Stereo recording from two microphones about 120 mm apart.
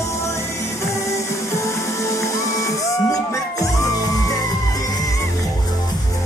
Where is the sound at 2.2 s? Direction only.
25° left (ahead or behind).